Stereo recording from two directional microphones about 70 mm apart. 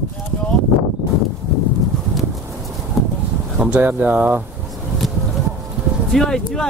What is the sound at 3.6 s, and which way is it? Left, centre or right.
Speech, right.